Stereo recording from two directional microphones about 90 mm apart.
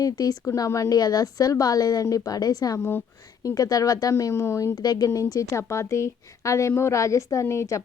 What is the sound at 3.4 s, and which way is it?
Speech, 45° left (ahead or behind).